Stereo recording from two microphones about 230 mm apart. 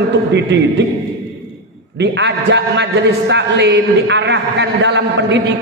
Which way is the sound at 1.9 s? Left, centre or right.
Right.